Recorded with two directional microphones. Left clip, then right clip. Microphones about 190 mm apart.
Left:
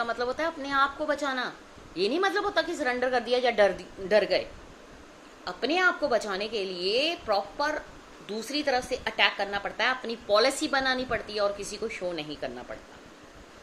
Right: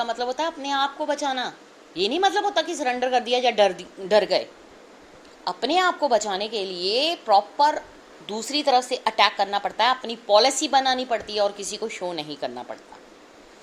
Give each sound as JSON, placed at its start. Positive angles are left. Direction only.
{"t": 0.0, "sound": "a woman's voice", "side_deg": -15}
{"t": 5.5, "sound": "a woman's voice", "side_deg": -25}